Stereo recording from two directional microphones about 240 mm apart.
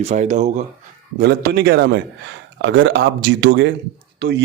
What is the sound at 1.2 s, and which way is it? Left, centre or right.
Speech, right.